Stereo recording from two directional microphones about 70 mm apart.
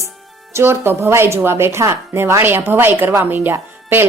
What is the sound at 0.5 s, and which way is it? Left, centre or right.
Speech, right.